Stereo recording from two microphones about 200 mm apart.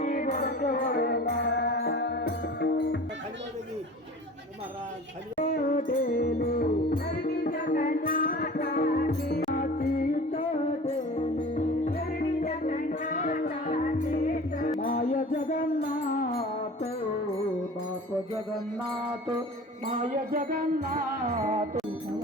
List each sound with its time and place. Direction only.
0.0 s music: 40° left (ahead or behind); by 3.0 s 55° left (ahead or behind)
5.4 s music: 45° left (ahead or behind)
10.8 s music: 25° left (ahead or behind); by 16.5 s 45° left (ahead or behind)
20.0 s music: 45° right (ahead or behind)